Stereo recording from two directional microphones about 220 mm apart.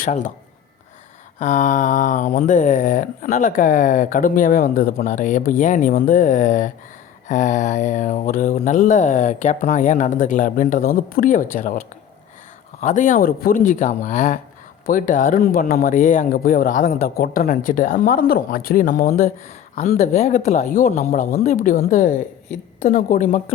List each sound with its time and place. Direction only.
0.0 s speech: 35° left (ahead or behind)
1.4 s speech: 35° left (ahead or behind)
12.8 s speech: 35° left (ahead or behind)